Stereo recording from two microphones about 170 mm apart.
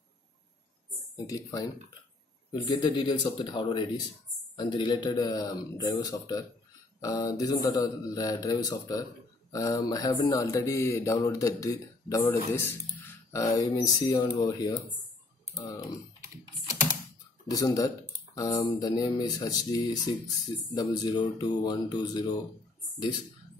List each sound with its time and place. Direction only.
1.1 s speech: 20° left (ahead or behind)
17.5 s speech: 20° left (ahead or behind)